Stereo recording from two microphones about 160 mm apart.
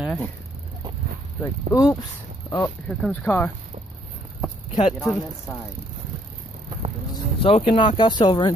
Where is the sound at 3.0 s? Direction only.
10° left (ahead or behind).